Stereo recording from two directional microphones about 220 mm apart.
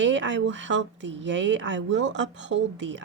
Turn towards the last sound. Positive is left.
turn(degrees=-55)  # may be behind; listen again after turning